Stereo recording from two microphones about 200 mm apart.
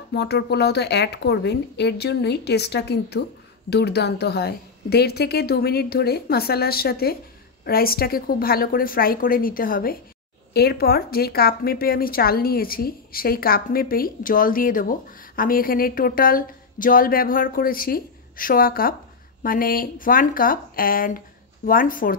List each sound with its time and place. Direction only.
0.1 s a woman's voice: 55° left (ahead or behind)